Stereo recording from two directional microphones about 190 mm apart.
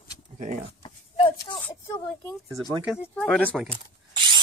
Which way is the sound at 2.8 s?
Centre (ahead or behind).